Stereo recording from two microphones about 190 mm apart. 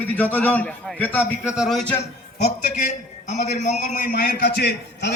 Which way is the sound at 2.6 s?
40° left (ahead or behind).